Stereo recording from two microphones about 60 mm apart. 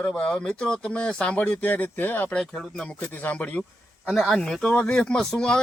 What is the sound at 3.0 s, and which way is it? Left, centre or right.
A man's voice, left.